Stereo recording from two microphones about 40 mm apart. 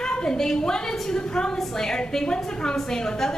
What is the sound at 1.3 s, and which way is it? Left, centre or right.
A woman's voice, left.